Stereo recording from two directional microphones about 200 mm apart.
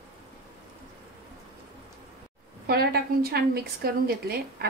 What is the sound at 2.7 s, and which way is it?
A woman's voice, 50° right (ahead or behind).